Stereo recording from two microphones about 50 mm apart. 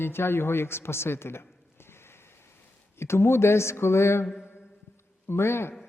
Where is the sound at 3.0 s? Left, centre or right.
Left.